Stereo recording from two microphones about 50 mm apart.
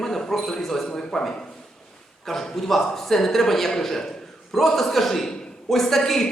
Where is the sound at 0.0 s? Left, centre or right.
Centre.